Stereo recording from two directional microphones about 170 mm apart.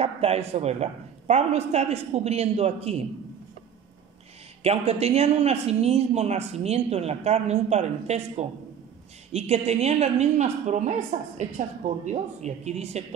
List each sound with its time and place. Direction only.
0.0 s speech: 35° right (ahead or behind)
4.6 s speech: 40° right (ahead or behind)